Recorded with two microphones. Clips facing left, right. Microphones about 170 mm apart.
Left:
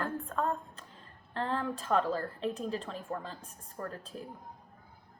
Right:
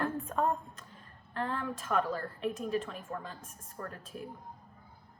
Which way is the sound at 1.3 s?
30° left (ahead or behind).